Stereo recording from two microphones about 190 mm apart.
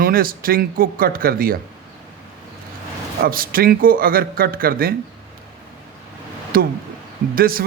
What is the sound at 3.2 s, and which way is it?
A man's voice, 50° right (ahead or behind).